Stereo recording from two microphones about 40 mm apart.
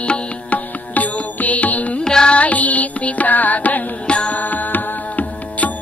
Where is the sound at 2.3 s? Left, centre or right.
Left.